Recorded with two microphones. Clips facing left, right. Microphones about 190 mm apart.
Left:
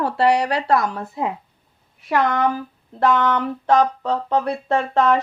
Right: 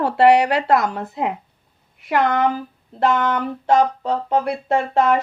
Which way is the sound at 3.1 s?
50° right (ahead or behind).